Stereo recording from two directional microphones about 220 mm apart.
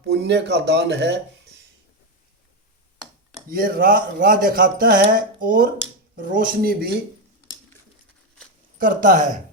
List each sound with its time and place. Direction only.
0.0 s speech: 50° right (ahead or behind)
3.5 s speech: 40° right (ahead or behind)
8.8 s speech: 35° right (ahead or behind)